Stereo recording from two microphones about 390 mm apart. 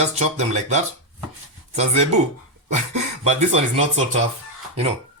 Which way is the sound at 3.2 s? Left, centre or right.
Centre.